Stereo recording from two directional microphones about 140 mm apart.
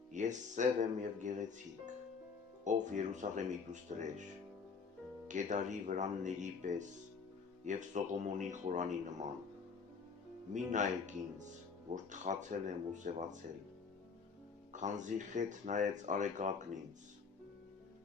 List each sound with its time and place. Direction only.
0.1 s speech: 60° right (ahead or behind)
2.6 s speech: 60° right (ahead or behind)
5.3 s speech: 60° right (ahead or behind)
10.5 s speech: 60° right (ahead or behind)
14.7 s speech: 60° right (ahead or behind)